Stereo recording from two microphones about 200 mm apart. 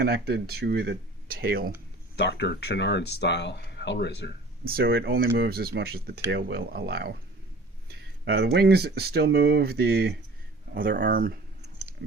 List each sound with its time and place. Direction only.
0.0 s speech: 55° right (ahead or behind)
2.1 s speech: 60° left (ahead or behind)
4.6 s speech: 50° right (ahead or behind)
10.8 s speech: 45° right (ahead or behind)